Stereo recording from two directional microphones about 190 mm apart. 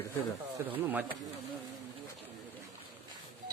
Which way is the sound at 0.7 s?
10° right (ahead or behind).